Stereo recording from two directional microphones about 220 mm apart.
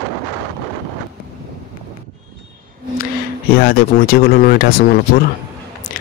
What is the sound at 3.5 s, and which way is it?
Speech, 45° left (ahead or behind).